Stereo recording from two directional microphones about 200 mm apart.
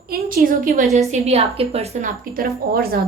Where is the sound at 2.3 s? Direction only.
50° right (ahead or behind).